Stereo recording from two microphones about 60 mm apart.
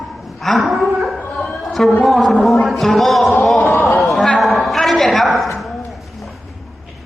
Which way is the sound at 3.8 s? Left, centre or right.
Left.